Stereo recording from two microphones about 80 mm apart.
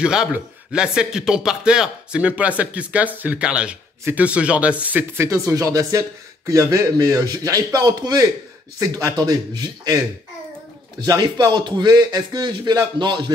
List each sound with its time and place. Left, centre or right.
0.0 s speech: centre
5.2 s speech: right
11.1 s speech: right